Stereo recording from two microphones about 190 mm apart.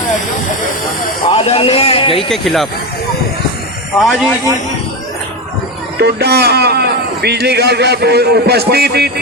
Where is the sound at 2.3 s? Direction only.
Centre (ahead or behind).